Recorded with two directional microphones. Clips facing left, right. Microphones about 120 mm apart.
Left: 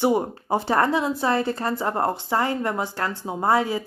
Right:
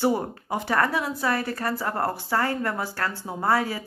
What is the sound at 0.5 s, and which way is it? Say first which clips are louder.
A woman's voice: left 4 dB; 30° left (ahead or behind).